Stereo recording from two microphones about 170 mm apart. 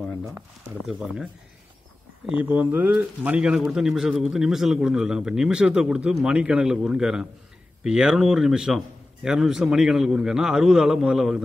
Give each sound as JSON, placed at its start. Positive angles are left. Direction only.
{"t": 0.8, "sound": "speech", "side_deg": -5}